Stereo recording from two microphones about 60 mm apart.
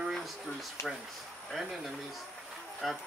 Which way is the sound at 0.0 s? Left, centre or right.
Centre.